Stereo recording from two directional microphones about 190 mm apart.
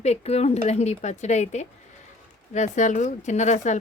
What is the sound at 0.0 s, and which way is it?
A woman's voice, 35° left (ahead or behind).